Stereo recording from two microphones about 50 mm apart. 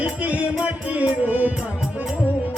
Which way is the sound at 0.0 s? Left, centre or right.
Right.